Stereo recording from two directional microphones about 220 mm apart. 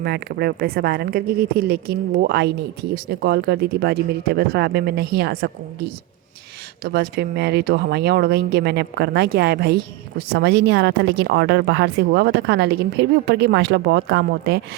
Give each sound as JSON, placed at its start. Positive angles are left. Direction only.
{"t": 0.0, "sound": "speech", "side_deg": -45}